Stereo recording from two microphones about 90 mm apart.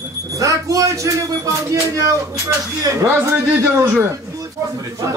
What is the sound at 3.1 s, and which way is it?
Speech, 25° right (ahead or behind).